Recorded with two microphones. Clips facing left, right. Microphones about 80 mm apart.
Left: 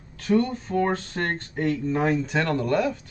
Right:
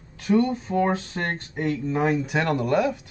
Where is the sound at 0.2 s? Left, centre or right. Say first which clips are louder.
Right 1 dB; centre.